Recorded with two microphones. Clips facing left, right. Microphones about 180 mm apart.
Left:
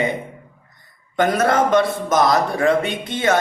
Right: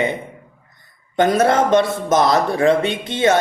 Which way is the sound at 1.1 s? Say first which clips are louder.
Right 2 dB; 25° right (ahead or behind).